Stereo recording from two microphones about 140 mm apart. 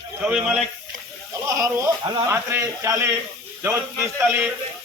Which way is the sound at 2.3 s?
15° right (ahead or behind).